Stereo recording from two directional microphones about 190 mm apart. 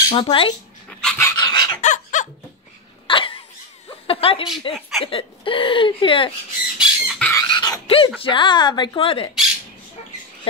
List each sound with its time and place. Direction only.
0.1 s speech: 30° left (ahead or behind)
0.8 s dog: 5° left (ahead or behind)
1.2 s chicken: 20° left (ahead or behind)
1.8 s chicken: 40° left (ahead or behind)
3.1 s dog: 25° left (ahead or behind)
4.1 s a woman's voice: 30° left (ahead or behind)
6.8 s squawk: 5° left (ahead or behind)
7.3 s dog: 25° left (ahead or behind)
8.2 s speech: 25° left (ahead or behind)